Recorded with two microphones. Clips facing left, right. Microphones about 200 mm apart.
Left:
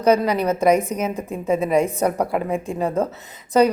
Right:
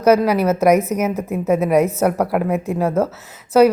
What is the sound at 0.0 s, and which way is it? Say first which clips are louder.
A woman's voice: right 3 dB; 5° right (ahead or behind).